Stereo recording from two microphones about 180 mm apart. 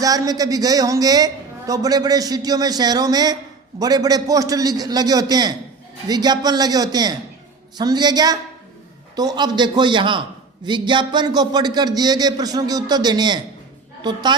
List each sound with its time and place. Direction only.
0.0 s a man's voice: 20° right (ahead or behind)